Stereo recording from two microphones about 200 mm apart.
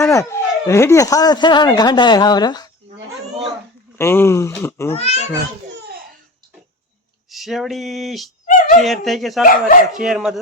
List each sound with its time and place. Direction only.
0.0 s speech: 15° left (ahead or behind)
3.9 s speech: 10° left (ahead or behind)
4.9 s a child's voice: 30° left (ahead or behind)
5.7 s a sound: 55° right (ahead or behind)
7.3 s speech: centre (ahead or behind)
8.4 s dog: 40° left (ahead or behind)
8.8 s speech: centre (ahead or behind)